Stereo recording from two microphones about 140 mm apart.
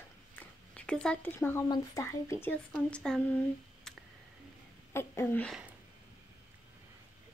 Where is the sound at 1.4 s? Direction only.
20° left (ahead or behind).